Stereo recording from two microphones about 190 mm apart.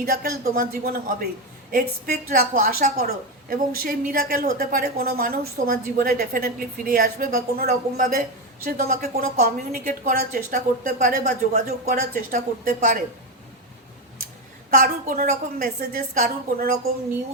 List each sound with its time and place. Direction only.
0.0 s a woman's voice: 50° right (ahead or behind)
9.4 s a woman's voice: 50° right (ahead or behind)
14.7 s a woman's voice: 50° right (ahead or behind)